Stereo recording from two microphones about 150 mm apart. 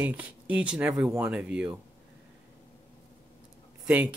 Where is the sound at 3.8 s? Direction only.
5° right (ahead or behind).